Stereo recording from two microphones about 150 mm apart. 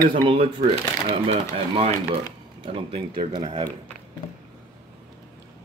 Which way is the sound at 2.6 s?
35° right (ahead or behind).